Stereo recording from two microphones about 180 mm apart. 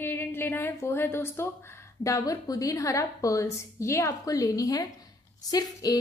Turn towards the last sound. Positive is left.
turn(degrees=20)  # may be behind; listen again after turning